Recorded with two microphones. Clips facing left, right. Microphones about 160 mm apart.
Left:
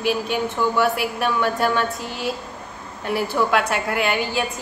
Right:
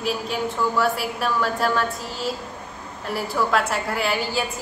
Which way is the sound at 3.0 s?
Centre (ahead or behind).